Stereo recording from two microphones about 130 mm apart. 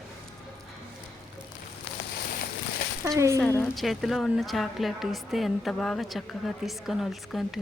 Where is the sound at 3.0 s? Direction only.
20° right (ahead or behind).